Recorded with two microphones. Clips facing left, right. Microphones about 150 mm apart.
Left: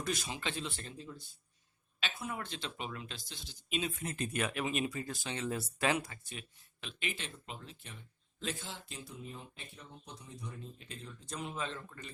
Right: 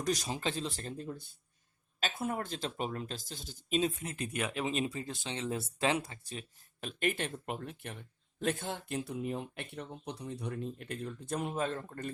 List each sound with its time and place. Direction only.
0.0 s speech: 35° right (ahead or behind)
0.9 s speech: 55° right (ahead or behind)
4.0 s speech: 10° right (ahead or behind); by 6.4 s 30° right (ahead or behind)
6.8 s speech: 55° right (ahead or behind)